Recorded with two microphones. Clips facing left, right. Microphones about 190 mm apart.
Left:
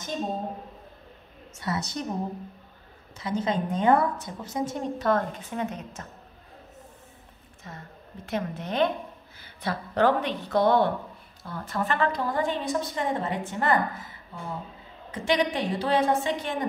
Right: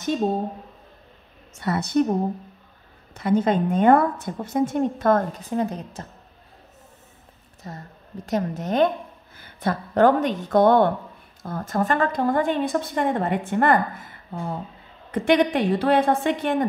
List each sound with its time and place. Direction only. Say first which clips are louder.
1.5 s a woman's voice: right 8 dB; 55° right (ahead or behind)
3.2 s a woman's voice: right 7 dB; 55° right (ahead or behind); by 6.0 s 35° right (ahead or behind)
7.7 s a woman's voice: right 5 dB; 40° right (ahead or behind); by 16.6 s 55° right (ahead or behind)